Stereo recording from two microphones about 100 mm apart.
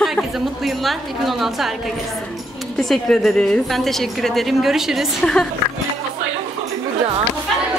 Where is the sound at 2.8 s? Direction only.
5° left (ahead or behind).